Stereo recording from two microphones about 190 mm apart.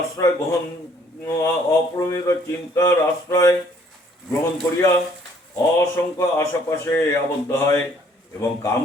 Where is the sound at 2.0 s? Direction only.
15° left (ahead or behind).